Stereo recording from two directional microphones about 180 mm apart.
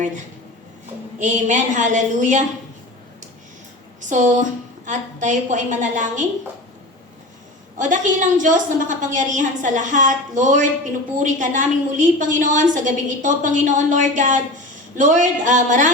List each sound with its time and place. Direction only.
1.2 s a woman's voice: 40° right (ahead or behind)
4.0 s a woman's voice: 40° right (ahead or behind)
7.8 s a woman's voice: 45° right (ahead or behind)